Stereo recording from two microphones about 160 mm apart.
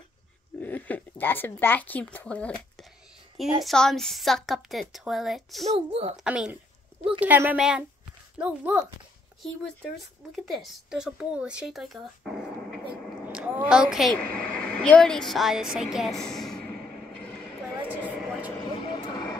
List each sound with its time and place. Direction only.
0.6 s speech: 10° left (ahead or behind)
3.6 s speech: 5° left (ahead or behind)
5.7 s speech: 40° right (ahead or behind)
6.1 s speech: 5° right (ahead or behind)
13.2 s a sound: 5° right (ahead or behind)
13.7 s speech: 5° right (ahead or behind)
14.1 s speech: 10° left (ahead or behind)
17.9 s a sound: 10° left (ahead or behind)
18.8 s vehicle: 25° left (ahead or behind)